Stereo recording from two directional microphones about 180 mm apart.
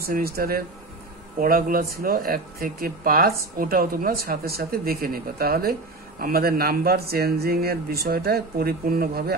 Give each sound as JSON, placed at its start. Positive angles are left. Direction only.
{"t": 0.0, "sound": "speech", "side_deg": -55}